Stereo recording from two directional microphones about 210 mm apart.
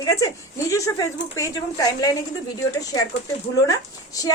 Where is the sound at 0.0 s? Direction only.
15° left (ahead or behind).